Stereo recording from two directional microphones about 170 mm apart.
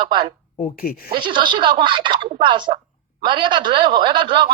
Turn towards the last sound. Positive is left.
turn(degrees=-30)  # may be behind; listen again after turning